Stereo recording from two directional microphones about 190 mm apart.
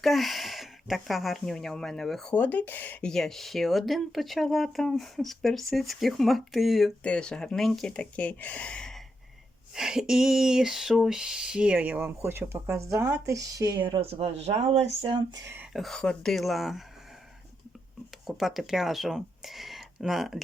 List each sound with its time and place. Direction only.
0.0 s speech: centre (ahead or behind)
9.7 s a sound: 5° right (ahead or behind)
15.7 s speech: centre (ahead or behind)
18.3 s speech: centre (ahead or behind)